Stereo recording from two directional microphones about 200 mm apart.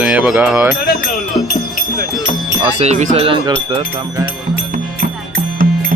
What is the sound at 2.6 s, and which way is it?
Speech, 30° right (ahead or behind).